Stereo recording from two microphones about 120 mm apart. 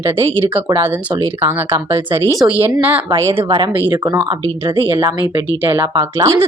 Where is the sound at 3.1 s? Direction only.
25° right (ahead or behind).